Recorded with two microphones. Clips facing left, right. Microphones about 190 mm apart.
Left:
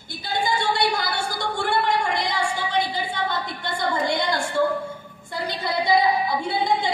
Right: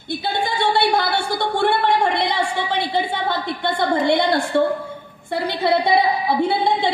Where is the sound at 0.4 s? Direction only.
60° right (ahead or behind).